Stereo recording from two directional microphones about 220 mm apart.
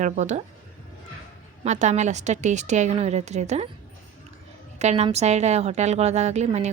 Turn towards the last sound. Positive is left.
turn(degrees=-30)  # may be behind; listen again after turning